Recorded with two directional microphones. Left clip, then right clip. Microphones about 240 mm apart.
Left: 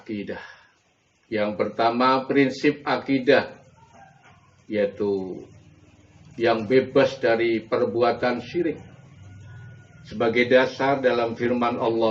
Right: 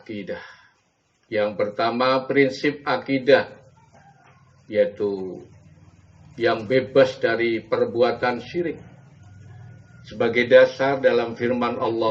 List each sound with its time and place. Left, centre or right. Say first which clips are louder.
1.3 s speech: right 2 dB; right
4.7 s speech: right 3 dB; right
6.3 s speech: even; right
10.0 s speech: even; right